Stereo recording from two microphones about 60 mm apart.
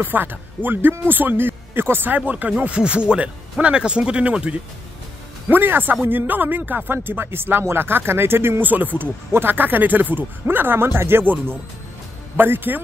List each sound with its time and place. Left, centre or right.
0.0 s speech: right
5.5 s speech: right